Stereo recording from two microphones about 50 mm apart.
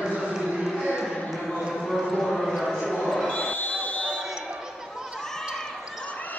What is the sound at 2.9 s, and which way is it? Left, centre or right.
Basketball bounce, centre.